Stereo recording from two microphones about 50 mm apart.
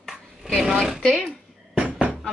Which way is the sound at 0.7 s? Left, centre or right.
Centre.